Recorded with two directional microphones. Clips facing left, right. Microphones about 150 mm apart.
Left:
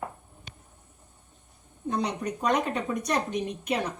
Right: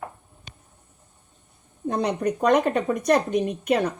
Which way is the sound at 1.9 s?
55° right (ahead or behind).